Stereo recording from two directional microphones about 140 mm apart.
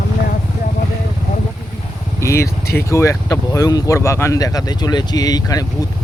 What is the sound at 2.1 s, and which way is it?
Speech, 20° left (ahead or behind).